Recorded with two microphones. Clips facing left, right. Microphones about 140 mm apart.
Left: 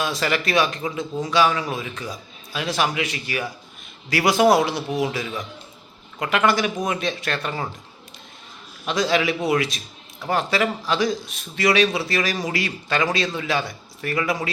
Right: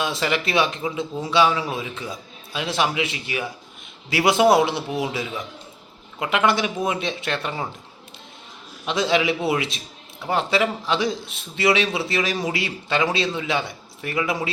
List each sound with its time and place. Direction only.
0.0 s a man's voice: 20° right (ahead or behind)
8.9 s a man's voice: 20° right (ahead or behind)